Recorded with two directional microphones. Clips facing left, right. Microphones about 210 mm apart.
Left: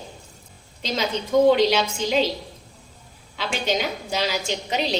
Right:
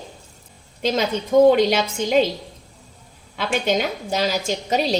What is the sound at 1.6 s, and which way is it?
Speech, 45° right (ahead or behind).